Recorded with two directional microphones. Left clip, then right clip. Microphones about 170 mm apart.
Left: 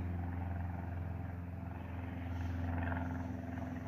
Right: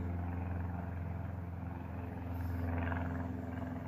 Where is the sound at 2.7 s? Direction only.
30° right (ahead or behind).